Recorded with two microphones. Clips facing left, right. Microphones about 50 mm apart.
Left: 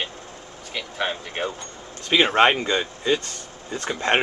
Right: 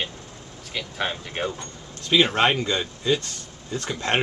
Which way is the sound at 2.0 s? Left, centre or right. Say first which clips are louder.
Left 2 dB; left.